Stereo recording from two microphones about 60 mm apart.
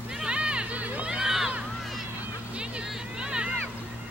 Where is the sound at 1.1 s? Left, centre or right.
Centre.